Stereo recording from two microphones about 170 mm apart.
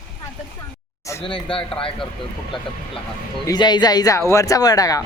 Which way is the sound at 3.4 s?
25° left (ahead or behind).